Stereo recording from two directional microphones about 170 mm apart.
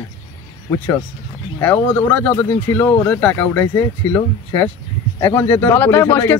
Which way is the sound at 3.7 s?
20° left (ahead or behind).